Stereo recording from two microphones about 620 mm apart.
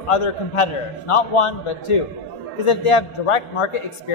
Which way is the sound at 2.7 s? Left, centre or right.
Left.